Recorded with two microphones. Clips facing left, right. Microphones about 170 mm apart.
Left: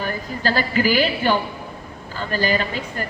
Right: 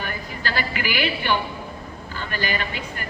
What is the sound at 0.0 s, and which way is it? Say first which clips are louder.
A man's voice: left 6 dB; 40° left (ahead or behind).